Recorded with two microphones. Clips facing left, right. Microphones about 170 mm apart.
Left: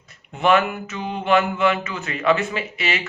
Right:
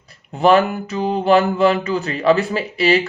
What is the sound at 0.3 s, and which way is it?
Speech, 35° right (ahead or behind).